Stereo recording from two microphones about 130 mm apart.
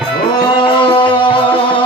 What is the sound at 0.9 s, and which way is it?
Music, 40° left (ahead or behind).